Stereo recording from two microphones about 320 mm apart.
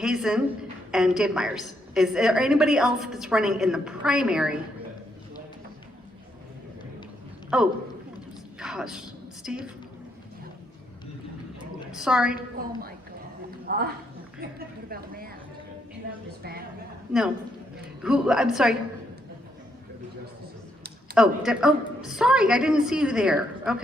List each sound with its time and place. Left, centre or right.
0.0 s a woman's voice: centre
7.5 s a woman's voice: centre
8.5 s a sound: centre
11.9 s a woman's voice: centre
13.7 s a woman's voice: right
17.1 s a woman's voice: centre
21.2 s a woman's voice: centre